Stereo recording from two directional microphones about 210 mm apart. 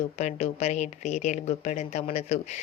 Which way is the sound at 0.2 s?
35° left (ahead or behind).